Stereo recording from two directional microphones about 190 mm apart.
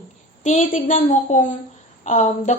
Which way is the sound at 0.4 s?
40° left (ahead or behind).